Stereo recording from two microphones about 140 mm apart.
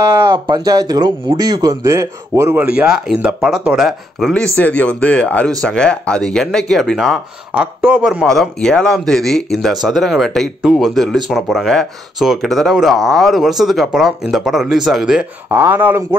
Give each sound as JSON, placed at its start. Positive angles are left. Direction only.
{"t": 0.1, "sound": "speech", "side_deg": -25}
{"t": 4.6, "sound": "speech", "side_deg": 10}
{"t": 8.3, "sound": "speech", "side_deg": 5}